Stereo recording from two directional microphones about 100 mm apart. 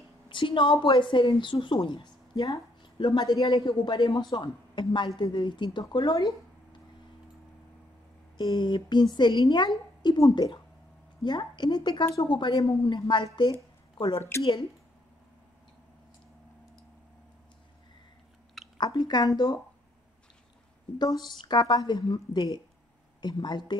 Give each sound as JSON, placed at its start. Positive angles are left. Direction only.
{"t": 0.3, "sound": "a woman's voice", "side_deg": 55}
{"t": 4.2, "sound": "a man's voice", "side_deg": 55}
{"t": 8.4, "sound": "a woman's voice", "side_deg": 45}
{"t": 11.2, "sound": "a woman's voice", "side_deg": 45}
{"t": 18.8, "sound": "a woman's voice", "side_deg": 45}
{"t": 21.0, "sound": "a woman's voice", "side_deg": 45}